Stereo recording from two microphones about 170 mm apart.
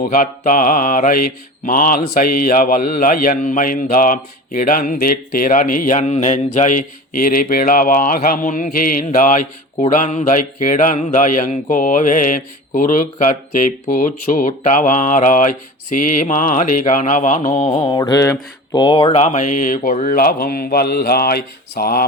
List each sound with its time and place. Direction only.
0.1 s speech: 55° left (ahead or behind)
17.8 s mantra: 20° left (ahead or behind)
19.2 s speech: 45° left (ahead or behind); by 22.0 s 60° left (ahead or behind)